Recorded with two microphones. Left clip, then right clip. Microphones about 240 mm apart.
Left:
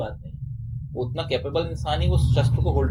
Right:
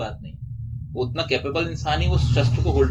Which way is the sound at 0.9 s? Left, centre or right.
Left.